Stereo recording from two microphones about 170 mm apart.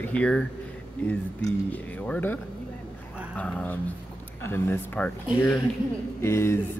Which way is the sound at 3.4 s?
10° left (ahead or behind).